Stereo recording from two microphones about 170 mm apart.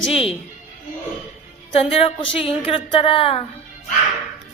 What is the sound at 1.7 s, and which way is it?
A woman's voice, 35° left (ahead or behind).